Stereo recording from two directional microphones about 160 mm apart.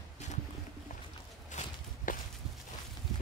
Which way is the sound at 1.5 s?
55° left (ahead or behind).